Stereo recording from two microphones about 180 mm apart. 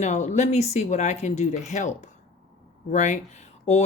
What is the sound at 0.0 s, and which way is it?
Speech, 40° left (ahead or behind).